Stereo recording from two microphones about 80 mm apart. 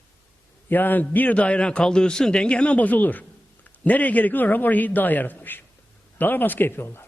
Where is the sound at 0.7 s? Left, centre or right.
Left.